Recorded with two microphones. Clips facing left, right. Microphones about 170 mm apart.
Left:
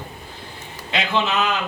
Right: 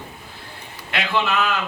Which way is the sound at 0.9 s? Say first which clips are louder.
Left 1 dB; 20° left (ahead or behind).